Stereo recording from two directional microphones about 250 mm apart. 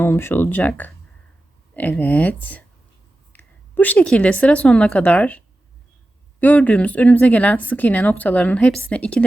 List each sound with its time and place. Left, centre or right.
0.0 s a woman's voice: centre
6.4 s a woman's voice: centre